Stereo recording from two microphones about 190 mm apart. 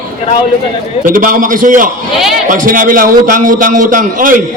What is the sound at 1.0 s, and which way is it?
A man's voice, 45° right (ahead or behind).